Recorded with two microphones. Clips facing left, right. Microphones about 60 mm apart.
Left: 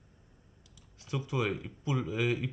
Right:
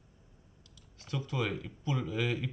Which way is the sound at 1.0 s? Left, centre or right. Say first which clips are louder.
Left 2 dB; centre.